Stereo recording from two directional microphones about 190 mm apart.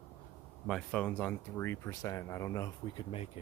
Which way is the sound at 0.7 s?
5° left (ahead or behind).